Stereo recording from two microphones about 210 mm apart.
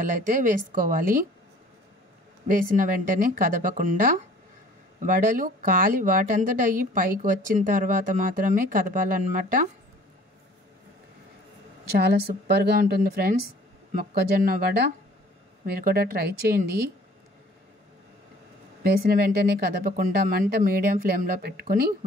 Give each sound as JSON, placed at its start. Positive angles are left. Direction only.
{"t": 0.0, "sound": "a woman's voice", "side_deg": -40}
{"t": 2.4, "sound": "a woman's voice", "side_deg": -40}
{"t": 11.9, "sound": "speech", "side_deg": -50}
{"t": 18.8, "sound": "speech", "side_deg": -45}